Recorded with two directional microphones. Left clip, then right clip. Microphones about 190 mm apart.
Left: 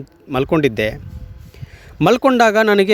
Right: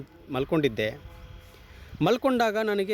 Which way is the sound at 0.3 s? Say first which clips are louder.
Left 10 dB; 50° left (ahead or behind).